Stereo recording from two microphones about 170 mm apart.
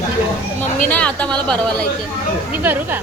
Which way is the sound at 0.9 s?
10° left (ahead or behind).